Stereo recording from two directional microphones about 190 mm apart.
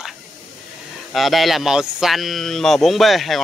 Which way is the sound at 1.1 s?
Centre (ahead or behind).